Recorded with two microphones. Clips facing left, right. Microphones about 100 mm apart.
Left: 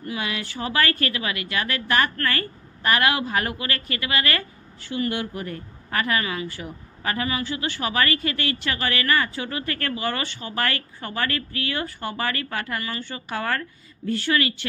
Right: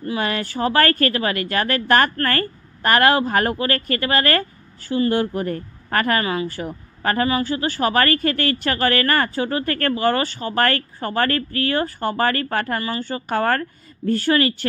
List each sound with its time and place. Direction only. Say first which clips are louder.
0.2 s a woman's voice: right 9 dB; 45° right (ahead or behind)